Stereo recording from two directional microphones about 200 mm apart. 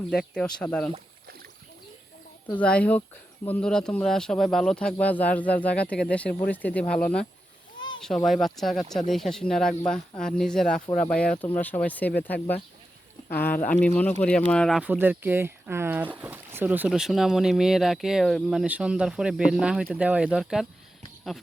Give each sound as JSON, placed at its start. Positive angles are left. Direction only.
{"t": 0.3, "sound": "speech", "side_deg": 5}
{"t": 2.6, "sound": "speech", "side_deg": 5}
{"t": 13.3, "sound": "speech", "side_deg": 45}
{"t": 13.7, "sound": "speech", "side_deg": 5}